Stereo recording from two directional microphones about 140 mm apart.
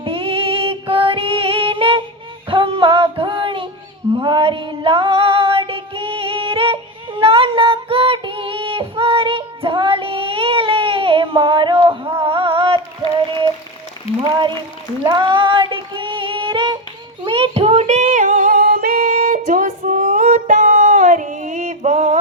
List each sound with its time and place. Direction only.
0.0 s female singing: 40° right (ahead or behind)
2.5 s music: 40° right (ahead or behind)
4.1 s female singing: 35° right (ahead or behind)
14.2 s a sound: 35° right (ahead or behind)
15.0 s female singing: 35° right (ahead or behind)
17.2 s singing: 40° right (ahead or behind); by 22.2 s 60° right (ahead or behind)